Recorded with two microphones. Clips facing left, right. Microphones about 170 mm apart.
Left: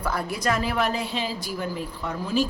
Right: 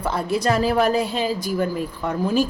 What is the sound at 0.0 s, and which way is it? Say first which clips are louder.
A woman's voice: right 5 dB; 25° right (ahead or behind).